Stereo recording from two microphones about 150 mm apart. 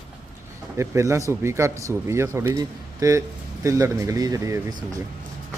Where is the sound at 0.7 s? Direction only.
20° right (ahead or behind).